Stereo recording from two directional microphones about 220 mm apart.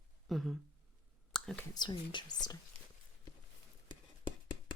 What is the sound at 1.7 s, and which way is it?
Speech, 20° left (ahead or behind).